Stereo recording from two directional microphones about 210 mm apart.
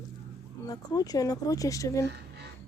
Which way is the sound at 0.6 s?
15° left (ahead or behind).